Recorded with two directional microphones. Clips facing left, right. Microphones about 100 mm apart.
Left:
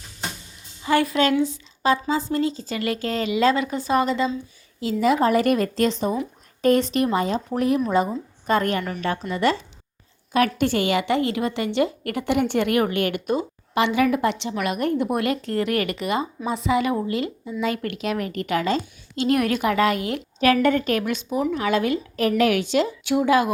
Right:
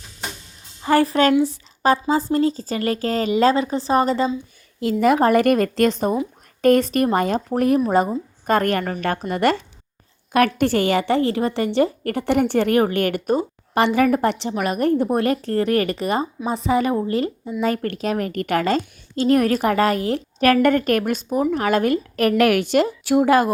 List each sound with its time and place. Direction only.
0.8 s a woman's voice: 40° right (ahead or behind)
4.8 s a woman's voice: 50° right (ahead or behind); by 20.2 s 35° right (ahead or behind)
20.4 s a woman's voice: 50° right (ahead or behind)